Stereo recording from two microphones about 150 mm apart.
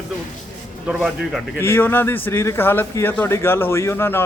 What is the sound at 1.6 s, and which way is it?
A man's voice, 15° left (ahead or behind).